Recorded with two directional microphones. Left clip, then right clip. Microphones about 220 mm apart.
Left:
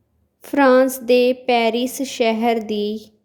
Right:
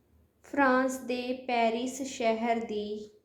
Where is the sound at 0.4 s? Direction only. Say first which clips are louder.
Left 12 dB; 50° left (ahead or behind).